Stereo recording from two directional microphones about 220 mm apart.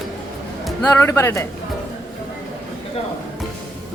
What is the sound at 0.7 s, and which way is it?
Speech, 10° left (ahead or behind).